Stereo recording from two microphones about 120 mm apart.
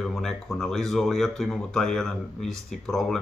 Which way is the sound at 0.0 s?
5° left (ahead or behind).